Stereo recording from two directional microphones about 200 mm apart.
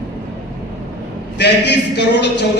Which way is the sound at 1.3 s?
60° left (ahead or behind).